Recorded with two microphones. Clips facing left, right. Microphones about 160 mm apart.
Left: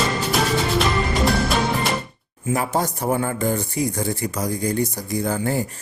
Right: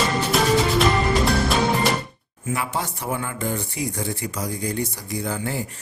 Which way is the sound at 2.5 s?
40° left (ahead or behind).